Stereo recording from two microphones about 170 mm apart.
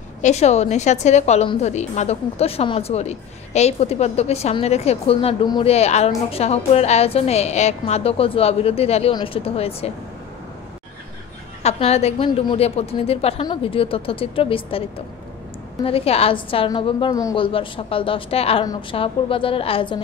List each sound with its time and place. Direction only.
0.2 s a woman's voice: 40° left (ahead or behind)
11.6 s a woman's voice: 40° left (ahead or behind); by 17.5 s 20° left (ahead or behind)
17.5 s a woman's voice: 30° left (ahead or behind)